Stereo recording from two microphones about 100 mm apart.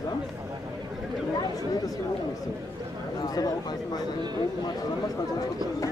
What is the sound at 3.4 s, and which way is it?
Speech, 40° left (ahead or behind).